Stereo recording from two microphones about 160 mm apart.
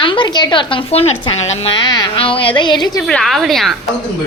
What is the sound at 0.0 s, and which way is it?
Speech, 30° left (ahead or behind).